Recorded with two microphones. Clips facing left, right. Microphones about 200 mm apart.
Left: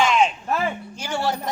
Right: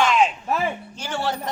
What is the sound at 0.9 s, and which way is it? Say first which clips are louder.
Speech: left 1 dB; 10° left (ahead or behind).